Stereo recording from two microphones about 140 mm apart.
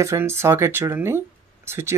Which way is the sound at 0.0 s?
20° right (ahead or behind).